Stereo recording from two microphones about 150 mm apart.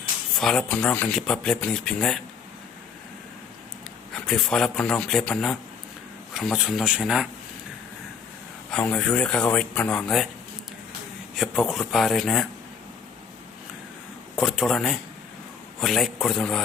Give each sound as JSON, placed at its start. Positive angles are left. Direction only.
{"t": 0.3, "sound": "speech", "side_deg": 5}
{"t": 4.1, "sound": "speech", "side_deg": 5}
{"t": 8.7, "sound": "speech", "side_deg": 5}
{"t": 11.3, "sound": "speech", "side_deg": 0}
{"t": 14.3, "sound": "speech", "side_deg": 0}